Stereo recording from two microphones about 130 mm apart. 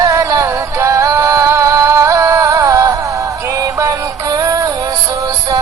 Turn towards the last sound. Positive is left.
turn(degrees=-25)  # may be behind; listen again after turning